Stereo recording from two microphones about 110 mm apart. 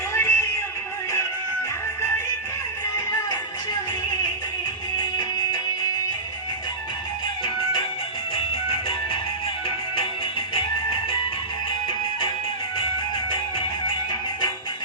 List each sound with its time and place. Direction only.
0.1 s music: 25° left (ahead or behind)
7.4 s music: 50° left (ahead or behind)
9.6 s music: 55° left (ahead or behind)